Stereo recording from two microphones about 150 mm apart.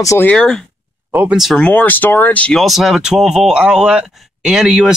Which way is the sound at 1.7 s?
10° left (ahead or behind).